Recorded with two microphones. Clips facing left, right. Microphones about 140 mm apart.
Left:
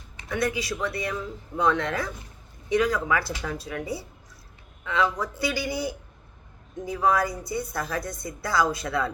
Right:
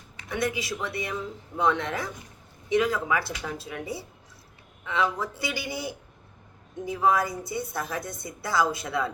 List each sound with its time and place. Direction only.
0.3 s a woman's voice: 20° right (ahead or behind)
5.2 s a woman's voice: 25° right (ahead or behind)